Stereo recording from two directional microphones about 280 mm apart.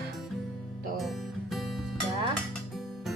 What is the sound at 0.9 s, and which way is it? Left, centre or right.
Music, centre.